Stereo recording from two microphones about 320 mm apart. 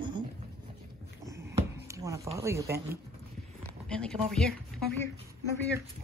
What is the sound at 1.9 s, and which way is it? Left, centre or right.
Speech, centre.